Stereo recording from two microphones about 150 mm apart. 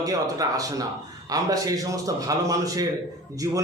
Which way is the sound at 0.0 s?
25° right (ahead or behind).